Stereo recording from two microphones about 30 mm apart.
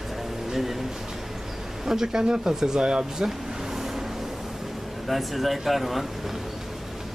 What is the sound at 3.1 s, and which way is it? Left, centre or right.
Vehicle, centre.